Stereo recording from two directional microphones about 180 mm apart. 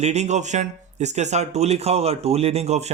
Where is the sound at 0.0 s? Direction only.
40° right (ahead or behind).